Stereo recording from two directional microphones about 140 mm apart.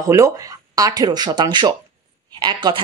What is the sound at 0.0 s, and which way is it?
A woman's voice, 25° right (ahead or behind).